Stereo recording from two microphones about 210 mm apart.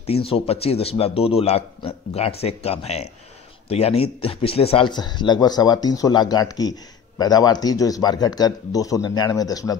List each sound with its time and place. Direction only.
0.0 s speech: 25° left (ahead or behind)